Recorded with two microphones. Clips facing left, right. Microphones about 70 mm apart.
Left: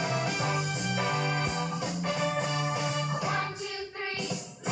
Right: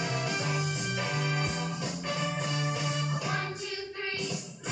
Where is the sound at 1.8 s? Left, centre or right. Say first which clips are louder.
Left 3 dB; left.